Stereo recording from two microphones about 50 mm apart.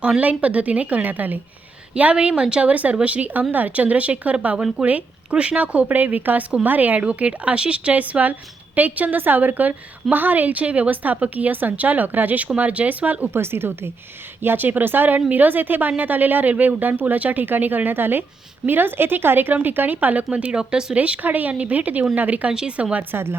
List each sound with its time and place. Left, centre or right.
0.2 s speech: right
2.0 s a woman's voice: right
7.0 s a woman's voice: right
13.3 s a woman's voice: right
14.4 s a woman's voice: right
20.3 s speech: right
20.9 s a woman's voice: right
22.4 s speech: centre
23.1 s a woman's voice: right